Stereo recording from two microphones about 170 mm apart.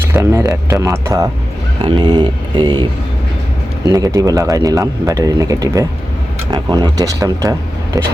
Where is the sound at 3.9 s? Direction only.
20° right (ahead or behind).